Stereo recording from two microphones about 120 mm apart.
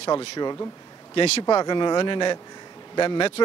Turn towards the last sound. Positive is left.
turn(degrees=40)  # may be behind; listen again after turning